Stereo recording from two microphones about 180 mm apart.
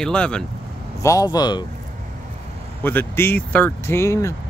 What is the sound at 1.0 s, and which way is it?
Speech, 20° left (ahead or behind).